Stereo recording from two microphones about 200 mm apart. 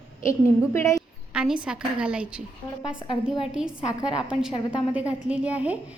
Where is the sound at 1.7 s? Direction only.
5° right (ahead or behind).